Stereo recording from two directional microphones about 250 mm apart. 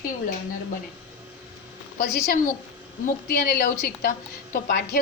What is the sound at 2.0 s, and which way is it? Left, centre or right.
A woman's voice, left.